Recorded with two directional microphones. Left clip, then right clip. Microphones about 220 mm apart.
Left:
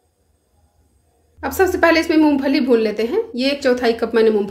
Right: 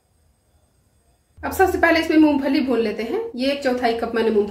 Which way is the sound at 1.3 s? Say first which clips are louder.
Left 1 dB; 45° left (ahead or behind).